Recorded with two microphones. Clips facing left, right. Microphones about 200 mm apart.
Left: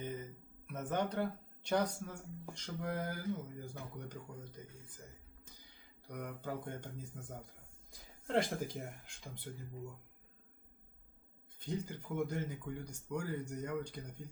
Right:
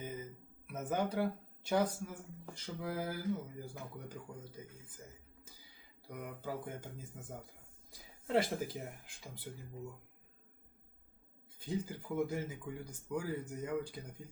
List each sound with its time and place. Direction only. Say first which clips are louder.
0.0 s a sound: left 1 dB; 5° right (ahead or behind)
0.7 s speech: right 1 dB; 5° right (ahead or behind)
6.1 s speech: even; 5° right (ahead or behind)
11.6 s speech: right 2 dB; 5° right (ahead or behind)